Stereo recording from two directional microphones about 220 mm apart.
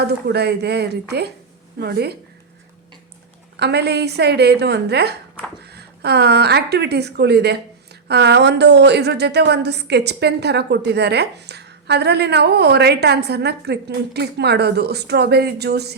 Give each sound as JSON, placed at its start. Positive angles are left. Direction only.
{"t": 0.0, "sound": "a woman's voice", "side_deg": -50}
{"t": 3.6, "sound": "a woman's voice", "side_deg": -50}